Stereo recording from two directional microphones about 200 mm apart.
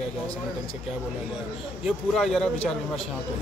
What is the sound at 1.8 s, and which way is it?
Speech, centre (ahead or behind).